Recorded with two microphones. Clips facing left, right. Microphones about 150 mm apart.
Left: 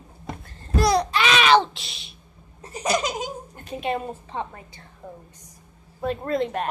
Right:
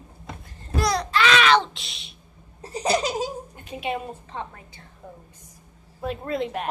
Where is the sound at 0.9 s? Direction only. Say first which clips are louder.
Even; 15° left (ahead or behind).